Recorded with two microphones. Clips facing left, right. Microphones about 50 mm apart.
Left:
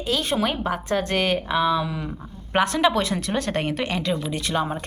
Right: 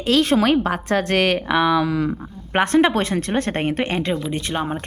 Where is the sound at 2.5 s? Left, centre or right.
Right.